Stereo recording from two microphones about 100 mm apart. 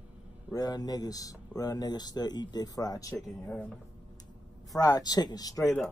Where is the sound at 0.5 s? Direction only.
40° left (ahead or behind).